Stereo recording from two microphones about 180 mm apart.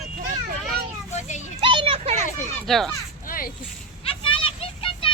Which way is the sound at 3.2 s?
50° left (ahead or behind).